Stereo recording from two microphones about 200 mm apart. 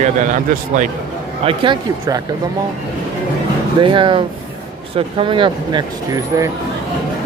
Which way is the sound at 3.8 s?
25° right (ahead or behind).